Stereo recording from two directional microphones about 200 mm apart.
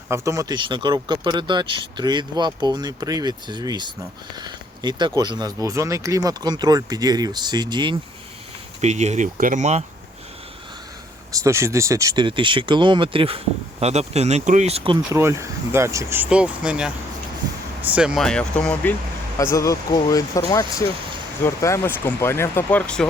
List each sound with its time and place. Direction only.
0.1 s speech: 15° right (ahead or behind)
8.8 s speech: 35° right (ahead or behind)
11.3 s speech: 15° right (ahead or behind); by 14.9 s 30° right (ahead or behind)
15.1 s speech: 15° right (ahead or behind); by 23.0 s 5° left (ahead or behind)